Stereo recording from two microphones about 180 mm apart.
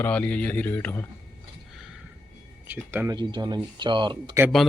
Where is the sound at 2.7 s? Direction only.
10° right (ahead or behind).